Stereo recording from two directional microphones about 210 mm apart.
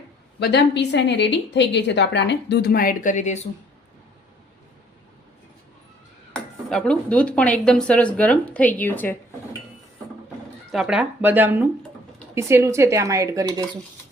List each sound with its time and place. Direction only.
0.3 s a woman's voice: 55° left (ahead or behind); by 3.4 s 35° left (ahead or behind)
6.3 s speech: 5° left (ahead or behind)
10.7 s speech: 5° right (ahead or behind)